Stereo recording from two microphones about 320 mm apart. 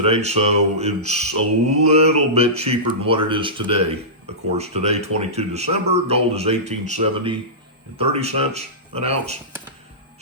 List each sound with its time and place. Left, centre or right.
0.0 s speech: centre